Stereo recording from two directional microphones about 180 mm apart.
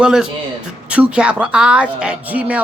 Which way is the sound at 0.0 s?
5° right (ahead or behind).